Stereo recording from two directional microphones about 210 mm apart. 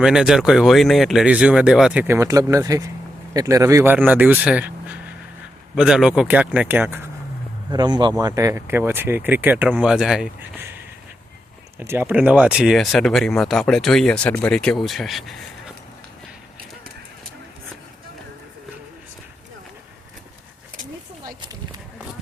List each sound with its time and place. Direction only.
0.0 s speech: 5° right (ahead or behind)
7.7 s speech: 20° right (ahead or behind)
11.8 s speech: 10° right (ahead or behind)
21.2 s a sound: 20° right (ahead or behind)